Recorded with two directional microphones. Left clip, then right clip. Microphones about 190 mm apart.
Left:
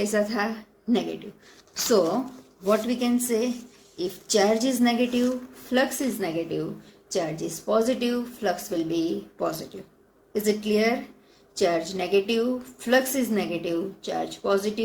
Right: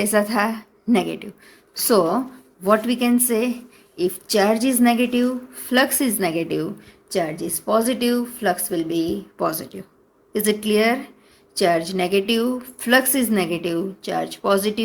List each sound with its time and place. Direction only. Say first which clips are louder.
0.0 s a woman's voice: right 6 dB; 45° right (ahead or behind)
2.6 s a woman's voice: right 5 dB; 40° right (ahead or behind)
6.1 s a woman's voice: right 6 dB; 55° right (ahead or behind)
7.1 s a woman's voice: right 4 dB; 40° right (ahead or behind)